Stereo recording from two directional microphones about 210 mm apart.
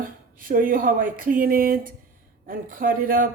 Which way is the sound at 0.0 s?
40° right (ahead or behind).